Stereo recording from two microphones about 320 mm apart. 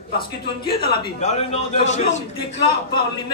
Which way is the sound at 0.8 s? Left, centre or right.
Centre.